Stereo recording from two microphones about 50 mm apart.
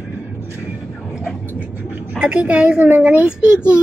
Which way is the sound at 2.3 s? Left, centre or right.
Right.